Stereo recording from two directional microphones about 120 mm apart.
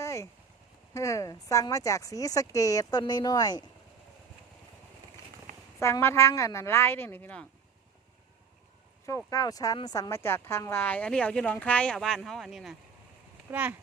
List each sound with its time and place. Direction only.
0.0 s vehicle: 25° left (ahead or behind)
0.9 s speech: 25° left (ahead or behind)
5.5 s a sound: 90° right
5.8 s speech: 20° left (ahead or behind)
9.0 s speech: 30° left (ahead or behind)
10.1 s speech: 20° left (ahead or behind); by 12.7 s centre (ahead or behind)
13.5 s speech: 10° right (ahead or behind)